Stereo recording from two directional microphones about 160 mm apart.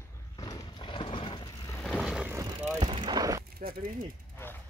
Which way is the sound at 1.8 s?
Centre (ahead or behind).